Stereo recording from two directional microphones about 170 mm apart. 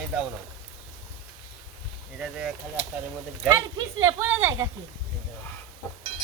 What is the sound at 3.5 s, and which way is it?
Speech, 15° right (ahead or behind).